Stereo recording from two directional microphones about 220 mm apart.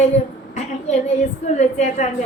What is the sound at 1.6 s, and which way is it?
Speech, 30° left (ahead or behind).